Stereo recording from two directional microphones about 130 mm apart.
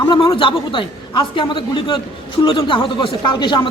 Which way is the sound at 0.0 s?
35° left (ahead or behind).